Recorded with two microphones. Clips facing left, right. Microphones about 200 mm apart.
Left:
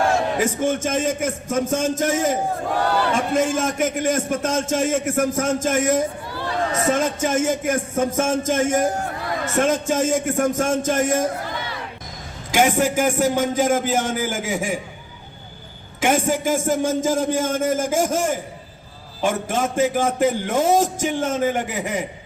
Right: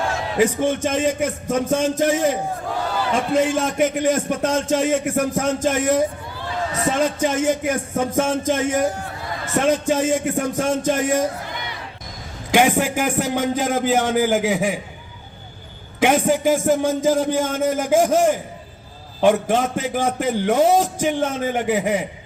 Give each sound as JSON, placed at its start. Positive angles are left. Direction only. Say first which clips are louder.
{"t": 0.3, "sound": "speech", "louder": "right 2 dB", "side_deg": 45}
{"t": 12.5, "sound": "a sound", "louder": "right 2 dB", "side_deg": 45}
{"t": 12.8, "sound": "speech", "louder": "left 3 dB", "side_deg": 45}
{"t": 16.0, "sound": "speech", "louder": "right 3 dB", "side_deg": 45}